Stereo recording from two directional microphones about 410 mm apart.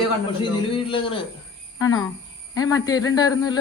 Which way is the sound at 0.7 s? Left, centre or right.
Centre.